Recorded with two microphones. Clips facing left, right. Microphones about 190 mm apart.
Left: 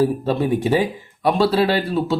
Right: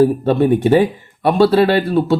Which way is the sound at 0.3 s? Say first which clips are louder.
Right 6 dB; 60° right (ahead or behind).